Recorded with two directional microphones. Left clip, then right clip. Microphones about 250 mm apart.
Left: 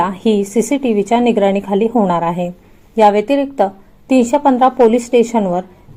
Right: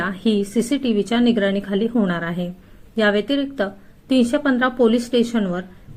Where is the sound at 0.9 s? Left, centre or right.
Left.